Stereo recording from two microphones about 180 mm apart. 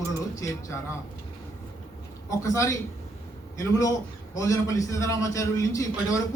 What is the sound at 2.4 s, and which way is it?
A man's voice, 15° left (ahead or behind).